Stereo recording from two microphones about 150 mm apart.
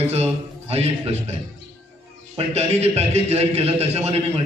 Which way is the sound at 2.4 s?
45° right (ahead or behind).